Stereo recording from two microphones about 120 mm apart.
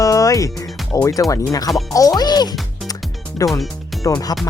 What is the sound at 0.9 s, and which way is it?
Speech, 25° left (ahead or behind).